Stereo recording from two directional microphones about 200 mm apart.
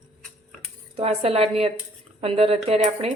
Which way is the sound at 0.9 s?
30° right (ahead or behind).